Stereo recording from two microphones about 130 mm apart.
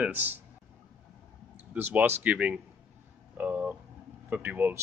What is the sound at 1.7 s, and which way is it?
A man's voice, 15° right (ahead or behind).